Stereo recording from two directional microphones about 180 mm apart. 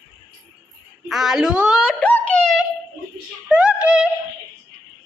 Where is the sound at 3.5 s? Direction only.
5° right (ahead or behind).